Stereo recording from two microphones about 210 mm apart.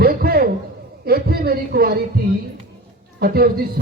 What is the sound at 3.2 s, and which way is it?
Speech, 45° right (ahead or behind).